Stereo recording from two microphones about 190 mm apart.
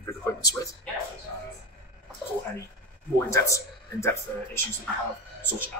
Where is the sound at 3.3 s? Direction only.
15° left (ahead or behind).